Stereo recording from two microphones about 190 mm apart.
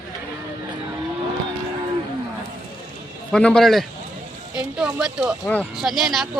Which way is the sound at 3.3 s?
5° left (ahead or behind).